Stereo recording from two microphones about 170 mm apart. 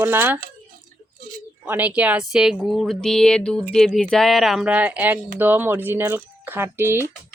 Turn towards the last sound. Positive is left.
turn(degrees=-15)  # may be behind; listen again after turning